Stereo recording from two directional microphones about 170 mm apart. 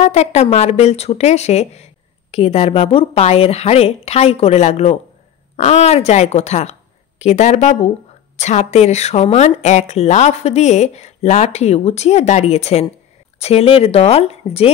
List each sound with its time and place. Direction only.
0.0 s a woman's voice: 40° left (ahead or behind)